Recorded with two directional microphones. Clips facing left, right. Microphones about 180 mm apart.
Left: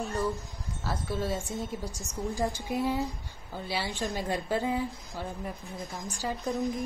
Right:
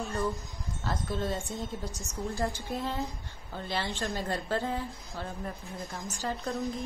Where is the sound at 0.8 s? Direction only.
5° left (ahead or behind).